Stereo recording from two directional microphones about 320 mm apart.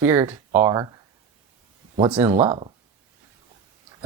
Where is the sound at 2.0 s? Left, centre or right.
Centre.